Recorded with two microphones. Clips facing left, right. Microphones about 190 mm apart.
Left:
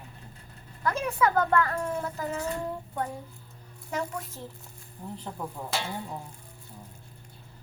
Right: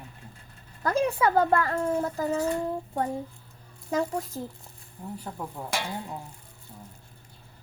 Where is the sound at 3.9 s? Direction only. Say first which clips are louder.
Right 5 dB; 35° right (ahead or behind).